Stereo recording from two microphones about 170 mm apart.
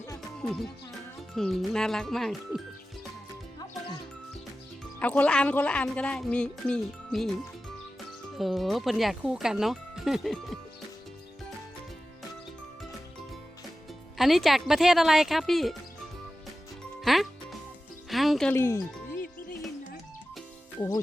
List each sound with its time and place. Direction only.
0.2 s music: centre (ahead or behind)
1.4 s speech: centre (ahead or behind)
4.9 s a woman's voice: 10° left (ahead or behind)
8.4 s speech: centre (ahead or behind)
14.2 s speech: centre (ahead or behind)
17.0 s music: centre (ahead or behind)
18.5 s a woman's voice: 15° left (ahead or behind)